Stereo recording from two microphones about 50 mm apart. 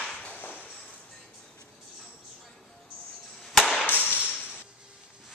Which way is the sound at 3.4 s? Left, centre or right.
Centre.